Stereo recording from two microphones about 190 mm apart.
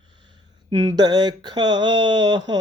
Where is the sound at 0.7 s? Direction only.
30° right (ahead or behind).